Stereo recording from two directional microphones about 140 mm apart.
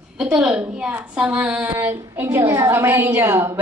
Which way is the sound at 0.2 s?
5° right (ahead or behind).